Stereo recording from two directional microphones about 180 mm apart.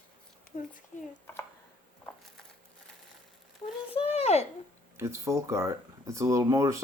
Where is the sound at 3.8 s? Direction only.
30° left (ahead or behind).